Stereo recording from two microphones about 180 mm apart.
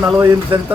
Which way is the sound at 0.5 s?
30° right (ahead or behind).